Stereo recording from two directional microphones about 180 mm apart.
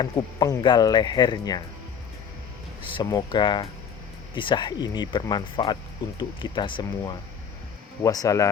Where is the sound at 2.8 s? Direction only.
30° left (ahead or behind).